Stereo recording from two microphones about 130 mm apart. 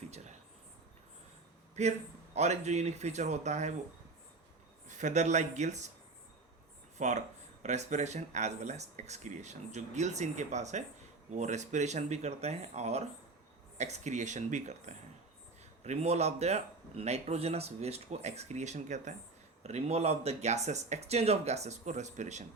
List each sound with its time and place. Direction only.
0.1 s a sound: 60° right (ahead or behind)
1.8 s speech: 60° right (ahead or behind)
4.9 s speech: 65° right (ahead or behind)
7.0 s speech: 65° right (ahead or behind)